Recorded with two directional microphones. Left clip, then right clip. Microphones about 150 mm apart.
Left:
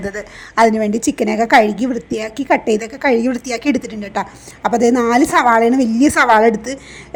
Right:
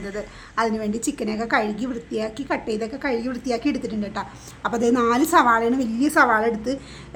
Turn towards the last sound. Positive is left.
turn(degrees=45)  # may be behind; listen again after turning